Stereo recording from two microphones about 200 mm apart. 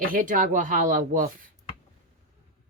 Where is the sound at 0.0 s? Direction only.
45° right (ahead or behind).